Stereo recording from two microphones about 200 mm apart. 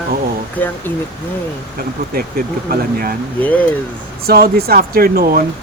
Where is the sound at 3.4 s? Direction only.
5° left (ahead or behind).